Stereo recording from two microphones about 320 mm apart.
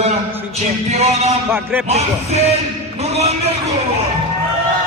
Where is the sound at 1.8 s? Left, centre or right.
Centre.